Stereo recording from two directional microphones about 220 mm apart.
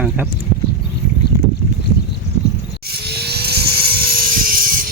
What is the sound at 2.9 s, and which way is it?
Helicopter, 45° right (ahead or behind).